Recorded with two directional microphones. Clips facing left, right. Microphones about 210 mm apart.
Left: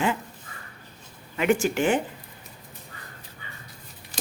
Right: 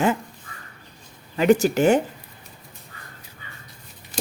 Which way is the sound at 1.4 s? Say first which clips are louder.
Right 5 dB; 35° right (ahead or behind).